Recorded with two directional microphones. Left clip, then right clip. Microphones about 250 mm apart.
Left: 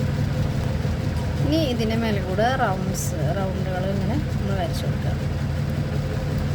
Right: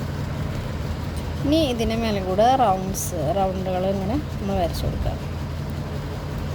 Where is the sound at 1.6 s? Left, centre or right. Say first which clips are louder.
Right 1 dB; centre.